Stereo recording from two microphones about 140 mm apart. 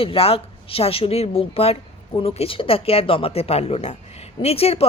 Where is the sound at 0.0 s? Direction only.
40° left (ahead or behind).